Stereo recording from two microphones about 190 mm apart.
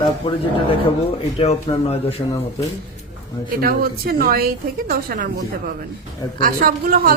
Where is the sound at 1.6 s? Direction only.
30° left (ahead or behind).